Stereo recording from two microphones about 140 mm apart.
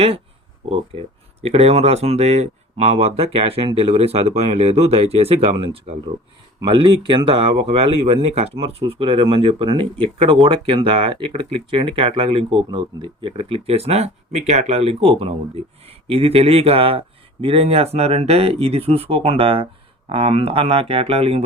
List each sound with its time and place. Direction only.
0.7 s speech: 45° right (ahead or behind)
5.9 s speech: 60° right (ahead or behind)
6.6 s speech: 35° right (ahead or behind)